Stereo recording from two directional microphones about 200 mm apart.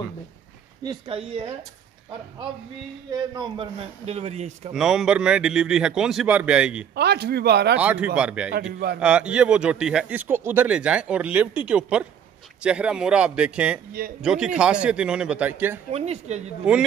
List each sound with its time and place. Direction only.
0.8 s speech: 25° right (ahead or behind)
3.1 s a man's voice: 25° right (ahead or behind)
4.7 s speech: 5° right (ahead or behind)
7.0 s speech: 55° right (ahead or behind)
7.8 s speech: 5° right (ahead or behind)
8.7 s a man's voice: 50° right (ahead or behind)
9.0 s speech: 5° right (ahead or behind)
15.9 s a man's voice: 35° right (ahead or behind)
16.6 s speech: 5° right (ahead or behind)